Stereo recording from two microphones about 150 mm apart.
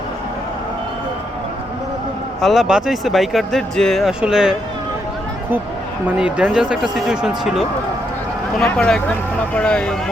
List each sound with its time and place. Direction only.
2.4 s speech: centre (ahead or behind)
6.1 s speech: 5° right (ahead or behind)